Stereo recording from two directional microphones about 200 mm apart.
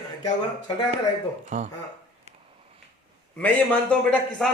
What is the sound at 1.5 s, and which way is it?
Speech, 35° right (ahead or behind).